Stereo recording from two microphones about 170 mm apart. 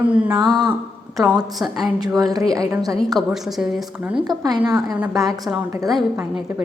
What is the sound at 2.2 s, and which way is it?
Speech, 20° right (ahead or behind).